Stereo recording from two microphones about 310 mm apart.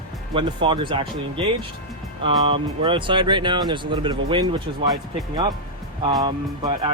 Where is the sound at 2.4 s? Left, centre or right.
Centre.